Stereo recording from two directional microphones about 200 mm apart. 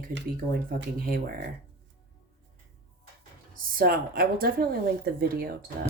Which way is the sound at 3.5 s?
45° right (ahead or behind).